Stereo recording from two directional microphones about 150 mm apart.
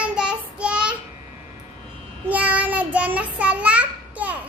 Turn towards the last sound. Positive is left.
turn(degrees=-10)  # may be behind; listen again after turning